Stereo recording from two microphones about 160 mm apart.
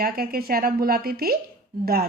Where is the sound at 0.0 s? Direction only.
70° right (ahead or behind).